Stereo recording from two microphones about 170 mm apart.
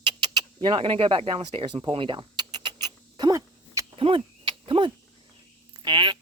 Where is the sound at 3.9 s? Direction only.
35° right (ahead or behind).